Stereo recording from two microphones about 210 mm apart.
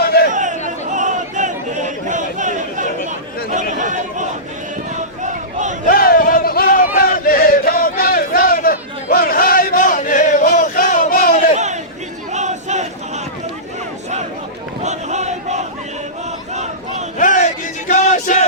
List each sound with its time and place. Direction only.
0.0 s chatter: 50° left (ahead or behind)
0.3 s chatter: 35° right (ahead or behind)
0.9 s a sound: 35° right (ahead or behind)
3.1 s chatter: 35° right (ahead or behind)
5.2 s a sound: 35° right (ahead or behind)
5.9 s a sound: 45° left (ahead or behind)
11.5 s chatter: 35° right (ahead or behind)
12.3 s crowd: 35° right (ahead or behind)
14.8 s battle cry: 35° right (ahead or behind)
17.2 s crowd: 35° left (ahead or behind)